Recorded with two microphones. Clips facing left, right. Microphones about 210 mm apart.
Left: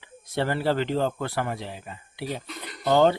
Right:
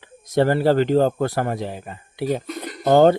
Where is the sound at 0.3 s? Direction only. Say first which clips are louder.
Right 8 dB; 40° right (ahead or behind).